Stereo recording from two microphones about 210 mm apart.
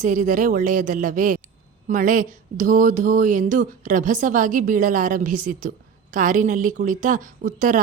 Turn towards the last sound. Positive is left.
turn(degrees=-40)  # may be behind; listen again after turning